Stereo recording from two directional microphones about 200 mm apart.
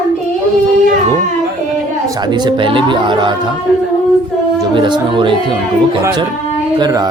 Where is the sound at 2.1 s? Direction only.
20° right (ahead or behind).